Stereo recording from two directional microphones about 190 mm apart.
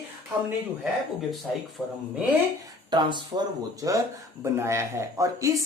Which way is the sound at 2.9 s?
25° right (ahead or behind).